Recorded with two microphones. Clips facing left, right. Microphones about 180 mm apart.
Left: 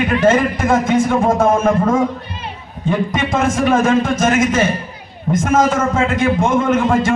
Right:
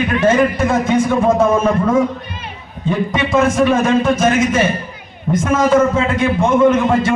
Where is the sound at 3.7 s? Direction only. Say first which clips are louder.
Even; 50° left (ahead or behind).